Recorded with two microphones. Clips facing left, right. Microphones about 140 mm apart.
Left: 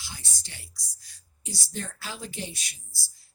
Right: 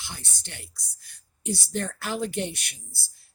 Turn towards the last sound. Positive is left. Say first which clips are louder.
# right 4 dB
turn(degrees=-60)  # may be behind; listen again after turning